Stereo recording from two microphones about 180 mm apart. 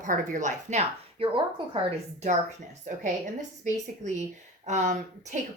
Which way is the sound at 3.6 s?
40° right (ahead or behind).